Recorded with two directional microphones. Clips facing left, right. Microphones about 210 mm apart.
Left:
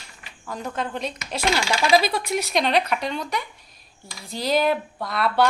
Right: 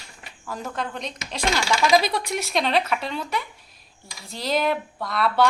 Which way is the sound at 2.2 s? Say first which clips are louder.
Left 2 dB; centre (ahead or behind).